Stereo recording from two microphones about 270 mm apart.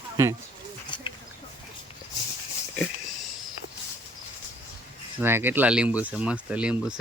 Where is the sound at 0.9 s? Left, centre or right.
Centre.